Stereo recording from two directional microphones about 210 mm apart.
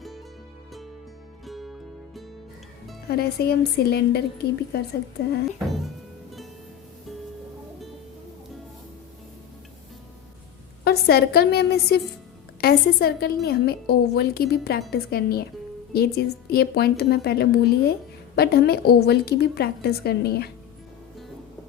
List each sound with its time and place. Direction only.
1.5 s music: centre (ahead or behind)
3.1 s a woman's voice: 50° left (ahead or behind)
10.8 s a woman's voice: 50° left (ahead or behind)